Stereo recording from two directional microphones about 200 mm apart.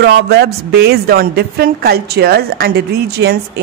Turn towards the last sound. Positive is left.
turn(degrees=-50)  # may be behind; listen again after turning